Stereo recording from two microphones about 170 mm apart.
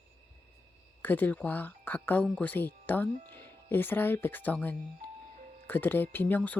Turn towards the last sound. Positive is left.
turn(degrees=10)  # may be behind; listen again after turning